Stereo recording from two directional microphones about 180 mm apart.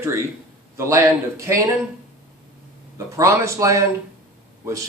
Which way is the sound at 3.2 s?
15° right (ahead or behind).